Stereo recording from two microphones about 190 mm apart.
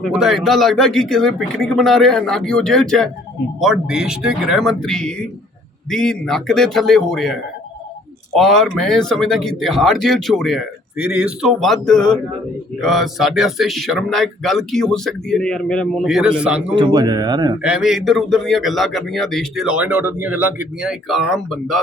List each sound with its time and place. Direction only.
0.0 s a man's voice: centre (ahead or behind)
8.4 s a man's voice: centre (ahead or behind)
16.7 s speech: 20° right (ahead or behind)
17.6 s a man's voice: 5° right (ahead or behind)